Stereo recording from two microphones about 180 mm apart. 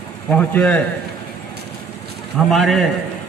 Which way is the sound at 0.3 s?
5° left (ahead or behind).